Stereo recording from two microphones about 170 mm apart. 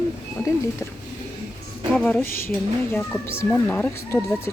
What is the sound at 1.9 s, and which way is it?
Speech, 10° left (ahead or behind).